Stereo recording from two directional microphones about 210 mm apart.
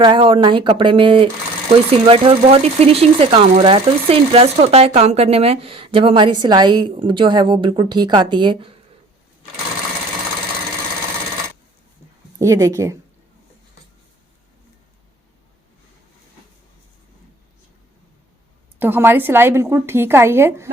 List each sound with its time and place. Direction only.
0.0 s speech: 25° right (ahead or behind)
12.4 s a woman's voice: 15° right (ahead or behind)
18.8 s a woman's voice: 10° right (ahead or behind)